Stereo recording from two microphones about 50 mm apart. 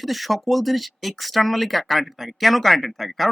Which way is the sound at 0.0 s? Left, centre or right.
Centre.